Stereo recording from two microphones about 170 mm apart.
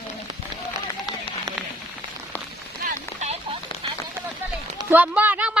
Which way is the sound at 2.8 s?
40° right (ahead or behind).